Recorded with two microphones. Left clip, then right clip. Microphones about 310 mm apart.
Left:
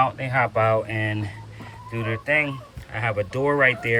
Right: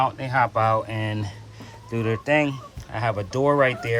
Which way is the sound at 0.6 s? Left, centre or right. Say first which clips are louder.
Left 1 dB; centre.